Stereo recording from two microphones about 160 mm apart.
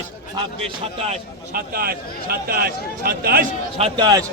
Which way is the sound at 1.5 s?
70° right (ahead or behind).